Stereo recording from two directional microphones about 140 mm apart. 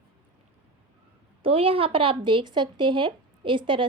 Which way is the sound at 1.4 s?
40° right (ahead or behind).